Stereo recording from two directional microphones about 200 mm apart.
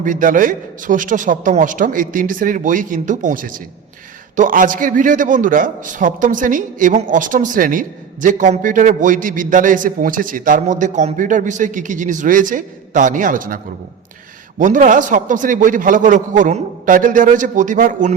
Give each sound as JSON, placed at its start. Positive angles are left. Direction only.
{"t": 0.0, "sound": "a man's voice", "side_deg": -40}
{"t": 14.6, "sound": "a man's voice", "side_deg": -40}